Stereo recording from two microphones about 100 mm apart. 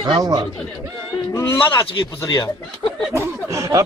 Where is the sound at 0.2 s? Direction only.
40° right (ahead or behind).